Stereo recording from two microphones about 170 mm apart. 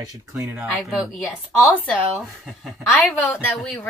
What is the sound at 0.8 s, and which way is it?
Speech, 5° left (ahead or behind).